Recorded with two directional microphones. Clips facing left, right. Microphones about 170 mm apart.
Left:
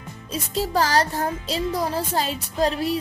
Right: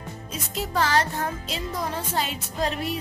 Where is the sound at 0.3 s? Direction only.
35° left (ahead or behind).